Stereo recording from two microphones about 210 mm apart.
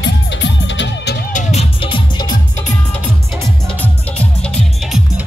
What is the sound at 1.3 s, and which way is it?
Music, 35° left (ahead or behind).